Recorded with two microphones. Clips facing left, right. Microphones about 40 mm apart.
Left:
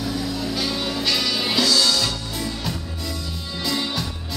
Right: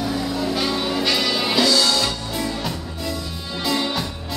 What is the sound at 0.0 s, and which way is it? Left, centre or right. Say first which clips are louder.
Music: right 3 dB; centre.